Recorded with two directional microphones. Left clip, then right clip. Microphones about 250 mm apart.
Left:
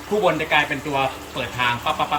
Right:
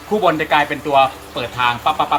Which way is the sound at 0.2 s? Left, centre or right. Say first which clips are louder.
Right 3 dB; centre.